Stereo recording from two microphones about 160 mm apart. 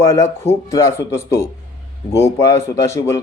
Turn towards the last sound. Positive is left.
turn(degrees=20)  # may be behind; listen again after turning